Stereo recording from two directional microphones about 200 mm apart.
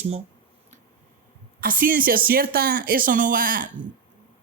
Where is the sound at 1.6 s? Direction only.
45° right (ahead or behind).